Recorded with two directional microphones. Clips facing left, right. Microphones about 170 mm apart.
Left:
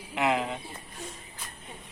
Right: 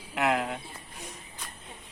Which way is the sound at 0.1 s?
Centre (ahead or behind).